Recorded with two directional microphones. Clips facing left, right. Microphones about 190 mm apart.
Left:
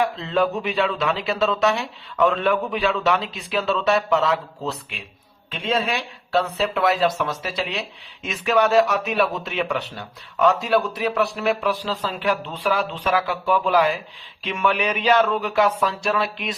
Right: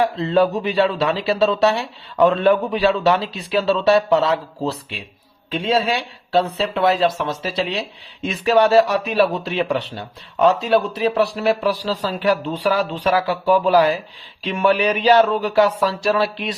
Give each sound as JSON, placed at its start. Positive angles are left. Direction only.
{"t": 0.0, "sound": "speech", "side_deg": -35}